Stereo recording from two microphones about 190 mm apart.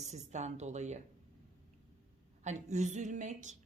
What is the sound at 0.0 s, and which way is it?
A woman's voice, 35° right (ahead or behind).